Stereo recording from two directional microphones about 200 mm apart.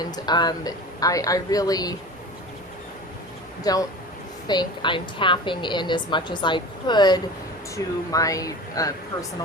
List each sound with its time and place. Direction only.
0.0 s a woman's voice: 20° left (ahead or behind)
3.6 s a woman's voice: 20° left (ahead or behind)